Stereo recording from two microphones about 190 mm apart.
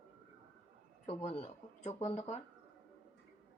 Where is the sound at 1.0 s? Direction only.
30° left (ahead or behind).